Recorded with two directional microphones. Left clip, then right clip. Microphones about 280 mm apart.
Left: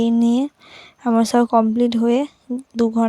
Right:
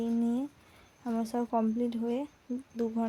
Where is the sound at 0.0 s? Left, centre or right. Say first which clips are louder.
Left 14 dB; left.